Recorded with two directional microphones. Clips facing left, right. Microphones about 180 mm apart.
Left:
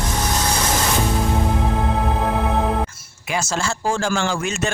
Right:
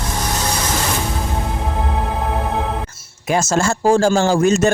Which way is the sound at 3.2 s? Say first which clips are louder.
Right 7 dB; 45° right (ahead or behind).